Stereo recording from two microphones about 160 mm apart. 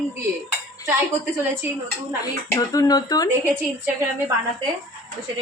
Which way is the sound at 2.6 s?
25° left (ahead or behind).